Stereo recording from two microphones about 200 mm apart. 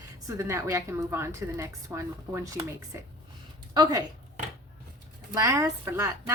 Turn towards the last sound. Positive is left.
turn(degrees=-15)  # may be behind; listen again after turning